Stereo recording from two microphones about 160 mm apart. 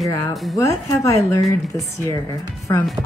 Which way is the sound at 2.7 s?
20° left (ahead or behind).